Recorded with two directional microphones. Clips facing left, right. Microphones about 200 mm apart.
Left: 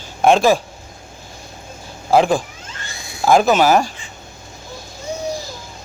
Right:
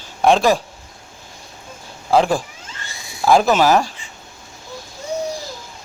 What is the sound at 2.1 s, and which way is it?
Speech, centre (ahead or behind).